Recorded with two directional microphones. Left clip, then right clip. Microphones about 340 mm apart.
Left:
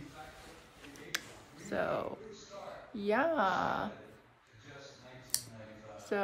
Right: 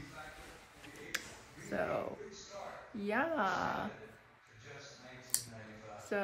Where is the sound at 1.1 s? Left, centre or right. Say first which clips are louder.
Left 2 dB; centre.